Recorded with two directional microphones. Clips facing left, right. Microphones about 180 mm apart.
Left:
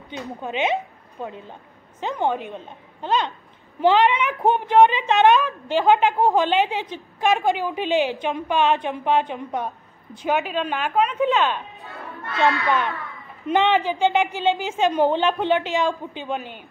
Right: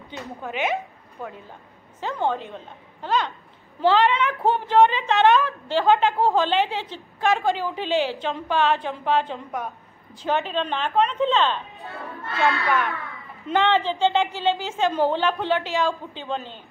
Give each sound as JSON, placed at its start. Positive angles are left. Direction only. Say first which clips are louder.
{"t": 0.1, "sound": "a woman's voice", "louder": "left 3 dB", "side_deg": 20}
{"t": 12.6, "sound": "a woman's voice", "louder": "left 1 dB", "side_deg": 20}